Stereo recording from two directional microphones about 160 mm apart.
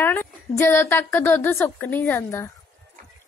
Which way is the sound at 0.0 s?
15° left (ahead or behind).